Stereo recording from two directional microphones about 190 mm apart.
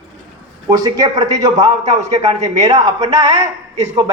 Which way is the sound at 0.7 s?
20° right (ahead or behind).